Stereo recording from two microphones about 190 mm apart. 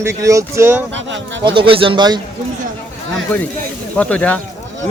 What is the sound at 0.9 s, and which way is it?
Speech, 75° right (ahead or behind).